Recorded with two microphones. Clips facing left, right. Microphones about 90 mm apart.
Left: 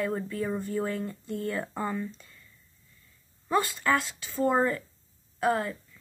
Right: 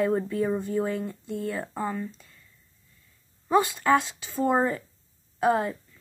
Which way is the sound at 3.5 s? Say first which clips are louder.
Right 5 dB; 15° right (ahead or behind).